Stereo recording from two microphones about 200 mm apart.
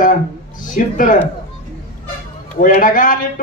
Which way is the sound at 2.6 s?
40° left (ahead or behind).